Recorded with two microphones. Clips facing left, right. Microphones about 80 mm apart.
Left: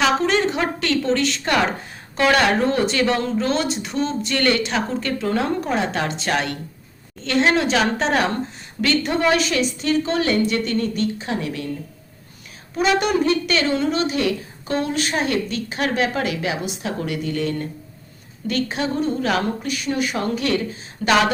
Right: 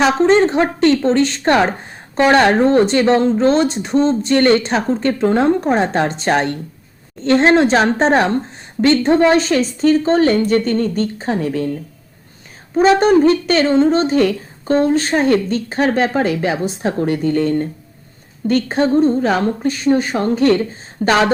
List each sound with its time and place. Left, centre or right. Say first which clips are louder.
0.0 s speech: right 6 dB; right
12.7 s speech: right 8 dB; right